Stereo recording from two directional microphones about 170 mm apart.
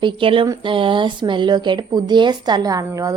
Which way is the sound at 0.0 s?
30° right (ahead or behind).